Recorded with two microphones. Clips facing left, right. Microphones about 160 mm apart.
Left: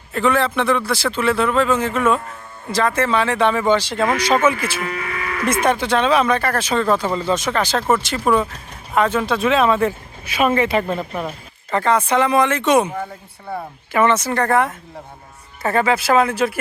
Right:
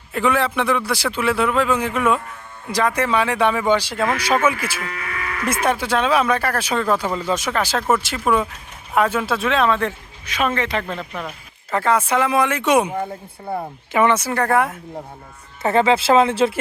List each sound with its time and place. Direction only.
0.1 s speech: 10° right (ahead or behind)
4.8 s speech: 25° left (ahead or behind)
5.6 s speech: 10° right (ahead or behind); by 11.0 s 10° left (ahead or behind)
11.7 s speech: 5° right (ahead or behind)
15.6 s speech: 20° right (ahead or behind)